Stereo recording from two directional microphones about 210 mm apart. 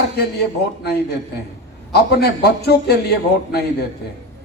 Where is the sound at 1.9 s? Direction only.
50° left (ahead or behind).